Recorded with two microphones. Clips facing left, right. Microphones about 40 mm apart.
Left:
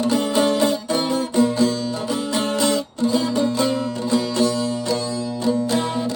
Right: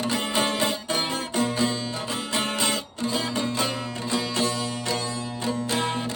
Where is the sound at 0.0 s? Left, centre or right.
Right.